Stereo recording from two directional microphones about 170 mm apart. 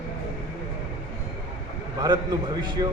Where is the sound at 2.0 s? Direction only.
25° right (ahead or behind).